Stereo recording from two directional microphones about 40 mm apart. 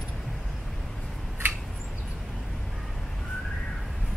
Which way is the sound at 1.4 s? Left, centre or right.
Right.